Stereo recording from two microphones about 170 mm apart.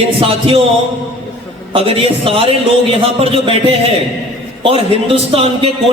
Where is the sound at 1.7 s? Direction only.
35° right (ahead or behind).